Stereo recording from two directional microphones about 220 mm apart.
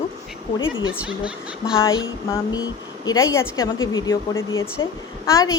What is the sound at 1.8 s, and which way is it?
A woman's voice, 15° left (ahead or behind).